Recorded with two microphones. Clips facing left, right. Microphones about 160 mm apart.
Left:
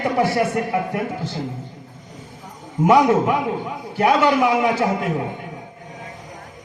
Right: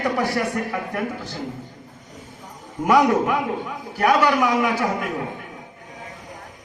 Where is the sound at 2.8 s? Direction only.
25° left (ahead or behind).